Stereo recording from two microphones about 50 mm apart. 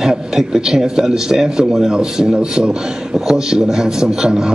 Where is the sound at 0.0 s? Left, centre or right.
Centre.